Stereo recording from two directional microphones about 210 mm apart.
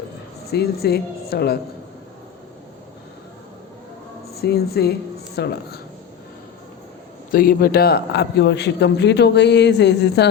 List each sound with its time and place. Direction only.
0.5 s a man's voice: 50° left (ahead or behind)
4.4 s a man's voice: 50° left (ahead or behind)
7.3 s a man's voice: 45° left (ahead or behind)